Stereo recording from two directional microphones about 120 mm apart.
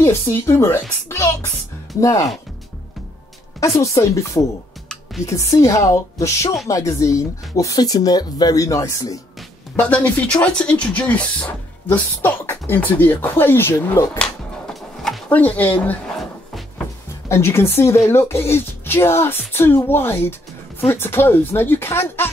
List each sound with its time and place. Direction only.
0.0 s speech: 20° left (ahead or behind)
3.6 s speech: 25° left (ahead or behind)
9.8 s speech: 10° left (ahead or behind)
14.1 s a sound: 5° left (ahead or behind)
15.2 s speech: 15° left (ahead or behind)
17.3 s speech: 20° left (ahead or behind)